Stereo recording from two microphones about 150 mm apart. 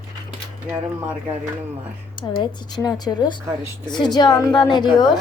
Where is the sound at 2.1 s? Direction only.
30° left (ahead or behind).